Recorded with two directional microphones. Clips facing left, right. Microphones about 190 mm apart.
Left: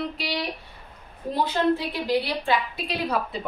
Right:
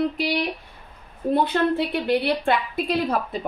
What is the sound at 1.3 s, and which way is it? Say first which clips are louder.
A woman's voice: right 2 dB; 60° right (ahead or behind).